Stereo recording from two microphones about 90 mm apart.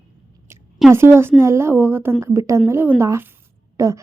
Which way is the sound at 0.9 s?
30° right (ahead or behind).